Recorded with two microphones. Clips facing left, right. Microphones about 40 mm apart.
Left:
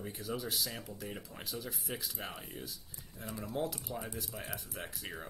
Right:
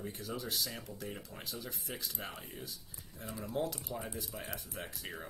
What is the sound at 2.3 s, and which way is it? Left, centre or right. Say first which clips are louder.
Speech: left 2 dB; left.